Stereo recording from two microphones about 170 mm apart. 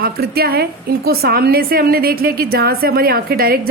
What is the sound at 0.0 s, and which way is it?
A woman's voice, 65° right (ahead or behind).